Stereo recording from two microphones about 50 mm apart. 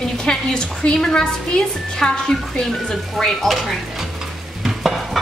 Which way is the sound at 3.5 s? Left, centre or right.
Centre.